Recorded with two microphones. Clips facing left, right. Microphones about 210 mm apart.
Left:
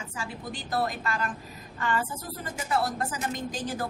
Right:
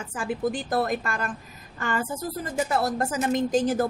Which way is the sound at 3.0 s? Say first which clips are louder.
Right 8 dB; 45° right (ahead or behind).